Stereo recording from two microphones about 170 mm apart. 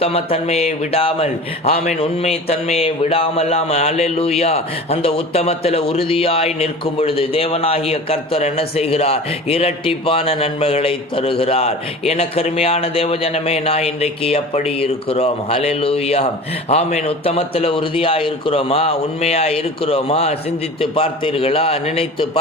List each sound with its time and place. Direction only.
0.0 s speech: 35° left (ahead or behind)